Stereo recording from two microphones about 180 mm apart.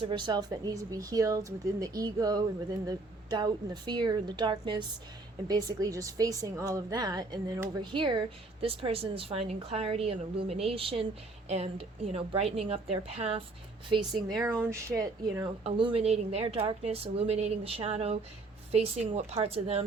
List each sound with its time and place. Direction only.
0.0 s a woman's voice: 30° right (ahead or behind)
13.9 s a woman's voice: 25° right (ahead or behind)
15.6 s speech: 30° right (ahead or behind)